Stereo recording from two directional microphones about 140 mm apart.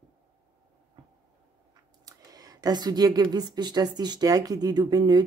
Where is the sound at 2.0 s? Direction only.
25° right (ahead or behind).